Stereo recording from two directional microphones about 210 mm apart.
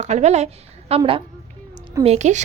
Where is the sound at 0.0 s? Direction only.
30° right (ahead or behind).